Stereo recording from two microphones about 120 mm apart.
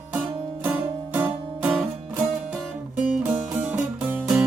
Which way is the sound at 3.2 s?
10° right (ahead or behind).